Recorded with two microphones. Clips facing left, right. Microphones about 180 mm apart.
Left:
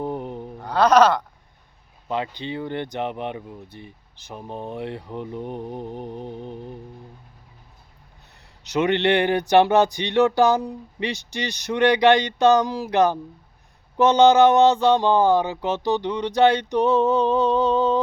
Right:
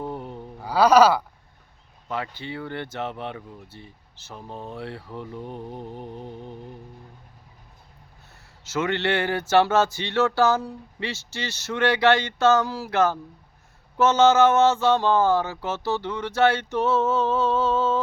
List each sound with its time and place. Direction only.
0.0 s a sound: 20° left (ahead or behind)
0.6 s speech: 5° right (ahead or behind)
2.0 s speech: 20° left (ahead or behind)
8.6 s speech: 20° left (ahead or behind)